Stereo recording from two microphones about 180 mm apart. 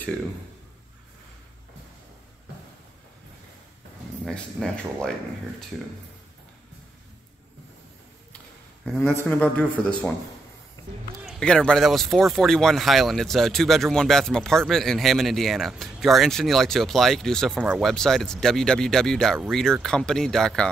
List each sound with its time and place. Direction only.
4.3 s speech: centre (ahead or behind)
8.8 s speech: 10° left (ahead or behind)
10.8 s a sound: 20° left (ahead or behind)
11.2 s speech: 5° left (ahead or behind)